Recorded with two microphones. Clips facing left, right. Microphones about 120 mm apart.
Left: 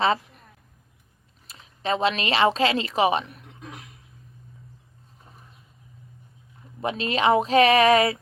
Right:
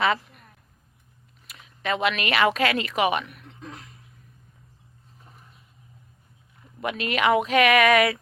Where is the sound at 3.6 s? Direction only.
15° left (ahead or behind).